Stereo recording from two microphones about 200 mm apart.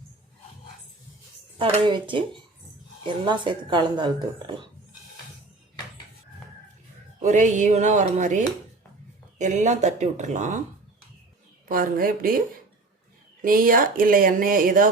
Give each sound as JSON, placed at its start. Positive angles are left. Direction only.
{"t": 1.5, "sound": "speech", "side_deg": -25}
{"t": 7.2, "sound": "speech", "side_deg": -35}
{"t": 11.7, "sound": "speech", "side_deg": -45}
{"t": 13.4, "sound": "speech", "side_deg": -45}